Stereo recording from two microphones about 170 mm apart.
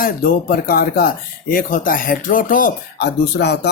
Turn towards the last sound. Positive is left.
turn(degrees=75)  # may be behind; listen again after turning